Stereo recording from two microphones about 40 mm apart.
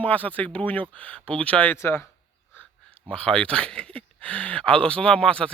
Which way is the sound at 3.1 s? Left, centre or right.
Left.